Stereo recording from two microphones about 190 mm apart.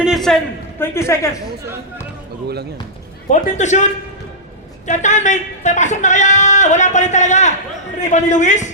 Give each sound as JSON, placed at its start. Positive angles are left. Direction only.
{"t": 0.0, "sound": "a man's voice", "side_deg": 0}
{"t": 3.2, "sound": "speech", "side_deg": 40}
{"t": 4.9, "sound": "speech", "side_deg": 40}